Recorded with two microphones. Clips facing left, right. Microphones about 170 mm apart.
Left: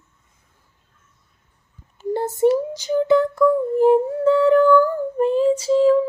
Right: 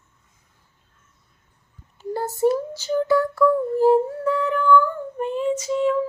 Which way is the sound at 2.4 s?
15° left (ahead or behind).